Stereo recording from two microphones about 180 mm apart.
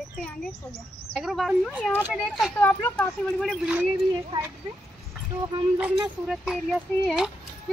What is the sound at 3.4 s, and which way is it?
Speech, 5° right (ahead or behind).